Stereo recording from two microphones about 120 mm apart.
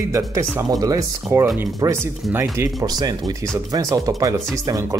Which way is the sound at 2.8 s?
30° right (ahead or behind).